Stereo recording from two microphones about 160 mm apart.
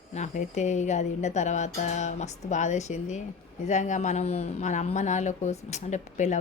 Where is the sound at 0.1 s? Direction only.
45° left (ahead or behind).